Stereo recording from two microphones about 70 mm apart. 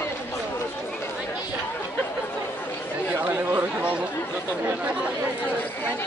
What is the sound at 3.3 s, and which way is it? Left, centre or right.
Chatter, right.